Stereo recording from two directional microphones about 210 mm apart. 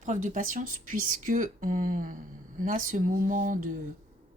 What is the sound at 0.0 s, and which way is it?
Speech, 35° right (ahead or behind).